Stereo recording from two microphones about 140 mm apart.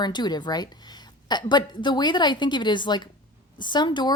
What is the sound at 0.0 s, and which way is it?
A woman's voice, 30° left (ahead or behind).